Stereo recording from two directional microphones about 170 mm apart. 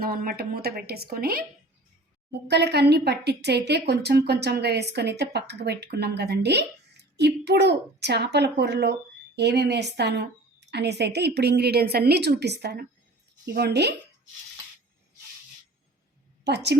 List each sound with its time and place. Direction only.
0.0 s speech: 60° right (ahead or behind)
2.5 s a woman's voice: 80° right
10.7 s a woman's voice: 80° right
16.4 s a woman's voice: 80° right